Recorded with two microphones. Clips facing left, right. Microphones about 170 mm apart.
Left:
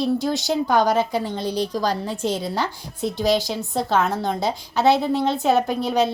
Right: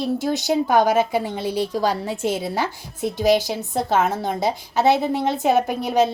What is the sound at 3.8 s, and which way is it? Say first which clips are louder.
Speech: right 1 dB; 20° right (ahead or behind).